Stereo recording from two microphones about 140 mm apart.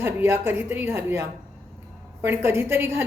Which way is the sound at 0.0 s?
15° right (ahead or behind).